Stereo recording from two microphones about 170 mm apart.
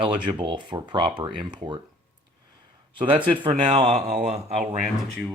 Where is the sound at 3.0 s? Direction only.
30° right (ahead or behind).